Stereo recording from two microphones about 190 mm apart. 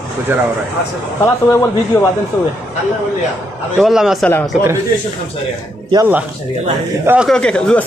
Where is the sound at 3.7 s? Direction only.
Centre (ahead or behind).